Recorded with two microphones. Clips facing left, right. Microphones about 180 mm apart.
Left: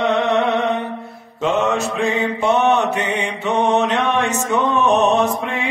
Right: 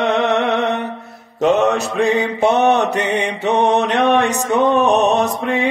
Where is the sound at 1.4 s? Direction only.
40° right (ahead or behind).